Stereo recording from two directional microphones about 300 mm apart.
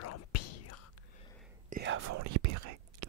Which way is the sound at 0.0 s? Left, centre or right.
Left.